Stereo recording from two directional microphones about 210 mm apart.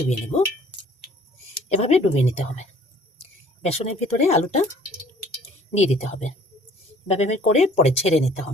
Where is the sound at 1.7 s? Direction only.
30° left (ahead or behind).